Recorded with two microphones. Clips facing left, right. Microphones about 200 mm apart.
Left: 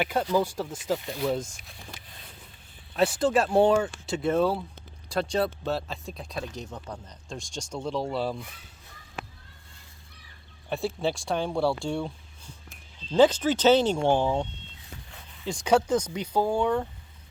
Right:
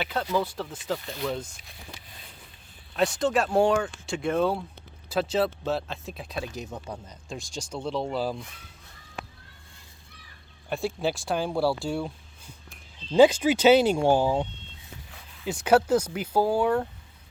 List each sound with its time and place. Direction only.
0.0 s speech: 10° left (ahead or behind)
2.9 s speech: 5° left (ahead or behind)
10.7 s speech: centre (ahead or behind)